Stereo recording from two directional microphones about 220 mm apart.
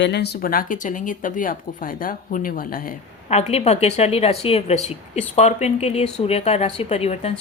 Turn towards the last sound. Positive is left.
turn(degrees=30)  # may be behind; listen again after turning